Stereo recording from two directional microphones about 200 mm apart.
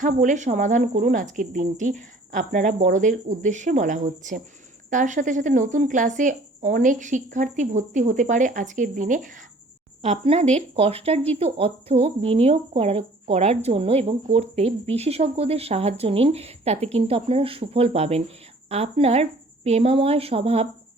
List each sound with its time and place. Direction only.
0.0 s a woman's voice: 40° right (ahead or behind)